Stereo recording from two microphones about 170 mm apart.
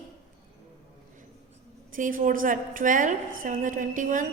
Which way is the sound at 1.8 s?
50° right (ahead or behind).